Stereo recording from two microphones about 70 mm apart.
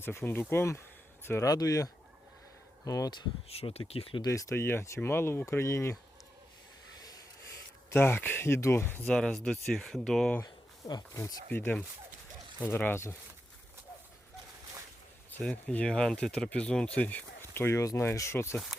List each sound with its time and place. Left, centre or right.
0.0 s speech: left
1.5 s speech: left
4.3 s speech: left
4.5 s speech: left
7.9 s speech: left
9.0 s speech: centre
10.4 s a sound: left
11.5 s speech: left
15.4 s speech: centre
17.4 s speech: left